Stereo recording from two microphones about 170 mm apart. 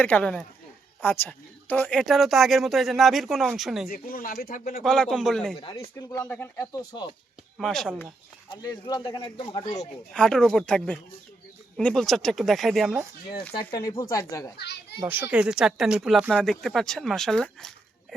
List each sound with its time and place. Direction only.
0.0 s speech: 10° left (ahead or behind)
3.8 s speech: 60° left (ahead or behind)
4.8 s speech: 5° left (ahead or behind)
5.5 s speech: 20° left (ahead or behind)
7.6 s speech: centre (ahead or behind)
8.4 s speech: 25° left (ahead or behind)
9.6 s speech: 40° left (ahead or behind)
10.1 s speech: 5° left (ahead or behind)
13.7 s speech: 20° left (ahead or behind)
14.6 s a child's voice: 75° left (ahead or behind)
15.0 s speech: 10° right (ahead or behind)